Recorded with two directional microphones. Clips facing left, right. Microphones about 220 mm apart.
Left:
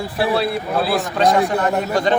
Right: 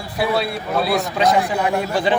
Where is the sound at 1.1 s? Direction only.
10° right (ahead or behind).